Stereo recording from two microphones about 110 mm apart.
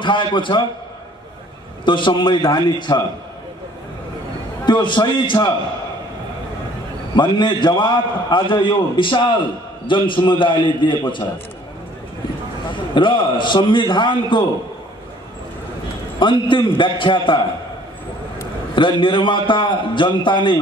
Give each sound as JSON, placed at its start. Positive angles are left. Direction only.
{"t": 0.0, "sound": "a man's voice", "side_deg": 45}
{"t": 1.9, "sound": "a man's voice", "side_deg": 50}
{"t": 4.6, "sound": "a man's voice", "side_deg": 45}
{"t": 7.2, "sound": "a man's voice", "side_deg": 45}
{"t": 12.6, "sound": "a man's voice", "side_deg": 45}
{"t": 16.2, "sound": "a man's voice", "side_deg": 45}
{"t": 18.8, "sound": "a man's voice", "side_deg": 50}